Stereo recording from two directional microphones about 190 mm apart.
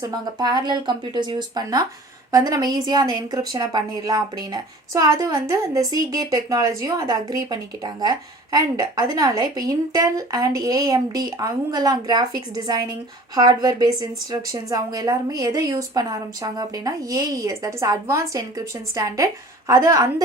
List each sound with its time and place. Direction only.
0.0 s a woman's voice: 20° right (ahead or behind)